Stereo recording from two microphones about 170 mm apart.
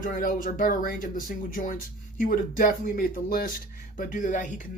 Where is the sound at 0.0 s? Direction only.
55° left (ahead or behind).